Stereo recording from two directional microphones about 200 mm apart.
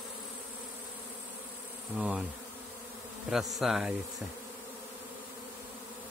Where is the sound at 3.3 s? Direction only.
Centre (ahead or behind).